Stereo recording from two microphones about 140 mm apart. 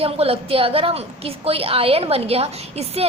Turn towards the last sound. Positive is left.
turn(degrees=-45)  # may be behind; listen again after turning